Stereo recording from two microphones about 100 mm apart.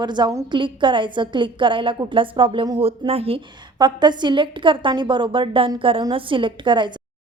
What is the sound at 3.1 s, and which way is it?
Speech, 75° right (ahead or behind).